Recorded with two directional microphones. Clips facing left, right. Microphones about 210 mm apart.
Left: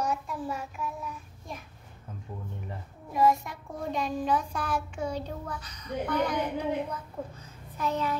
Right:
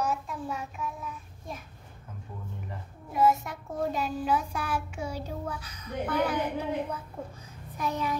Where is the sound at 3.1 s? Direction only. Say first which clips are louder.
Even; 5° right (ahead or behind).